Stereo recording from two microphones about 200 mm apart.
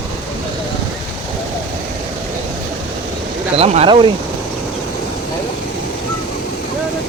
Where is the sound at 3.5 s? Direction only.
30° right (ahead or behind).